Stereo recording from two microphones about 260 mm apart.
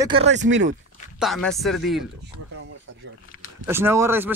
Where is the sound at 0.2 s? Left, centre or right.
Right.